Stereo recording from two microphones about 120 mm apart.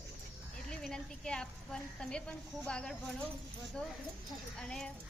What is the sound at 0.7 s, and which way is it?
A woman's voice, 5° left (ahead or behind).